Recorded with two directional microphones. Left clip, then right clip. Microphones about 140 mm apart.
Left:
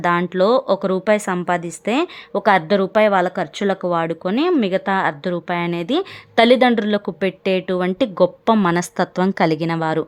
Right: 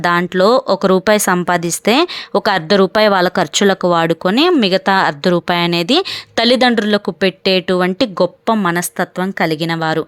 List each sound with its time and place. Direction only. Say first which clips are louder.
0.0 s speech: right 4 dB; 15° right (ahead or behind)
3.2 s speech: right 6 dB; 40° right (ahead or behind); by 8.3 s 15° right (ahead or behind)
8.4 s a woman's voice: right 1 dB; 5° right (ahead or behind)